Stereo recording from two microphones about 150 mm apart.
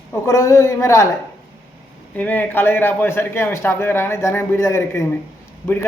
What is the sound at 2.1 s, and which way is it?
Speech, 10° left (ahead or behind).